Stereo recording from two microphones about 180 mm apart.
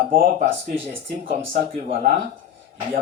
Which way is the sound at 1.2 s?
45° right (ahead or behind).